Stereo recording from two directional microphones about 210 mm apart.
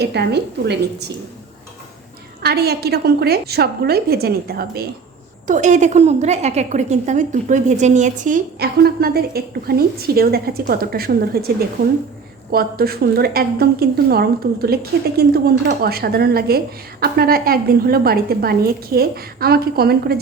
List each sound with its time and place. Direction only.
0.0 s a woman's voice: 50° right (ahead or behind)
2.4 s a woman's voice: 50° right (ahead or behind)
5.5 s a woman's voice: 35° right (ahead or behind)